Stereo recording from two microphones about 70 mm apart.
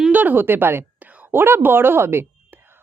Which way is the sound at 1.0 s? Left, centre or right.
Right.